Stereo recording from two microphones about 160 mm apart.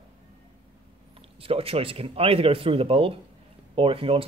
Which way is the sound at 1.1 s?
35° right (ahead or behind).